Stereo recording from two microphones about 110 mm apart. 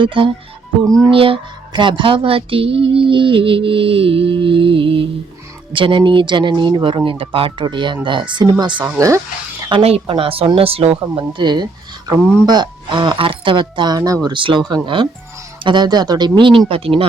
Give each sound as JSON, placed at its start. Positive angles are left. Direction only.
{"t": 0.0, "sound": "speech", "side_deg": -50}
{"t": 9.0, "sound": "speech", "side_deg": -30}
{"t": 9.8, "sound": "speech", "side_deg": -60}
{"t": 11.1, "sound": "speech", "side_deg": -45}
{"t": 14.3, "sound": "speech", "side_deg": -50}